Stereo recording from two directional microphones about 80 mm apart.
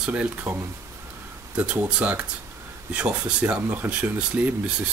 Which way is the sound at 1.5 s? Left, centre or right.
Centre.